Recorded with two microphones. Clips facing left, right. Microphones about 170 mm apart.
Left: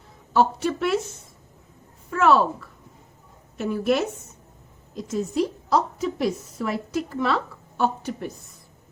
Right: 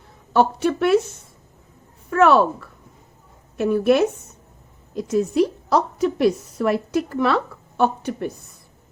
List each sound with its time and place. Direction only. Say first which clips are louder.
0.3 s a woman's voice: right 3 dB; 60° right (ahead or behind)
2.0 s a woman's voice: right 4 dB; 60° right (ahead or behind)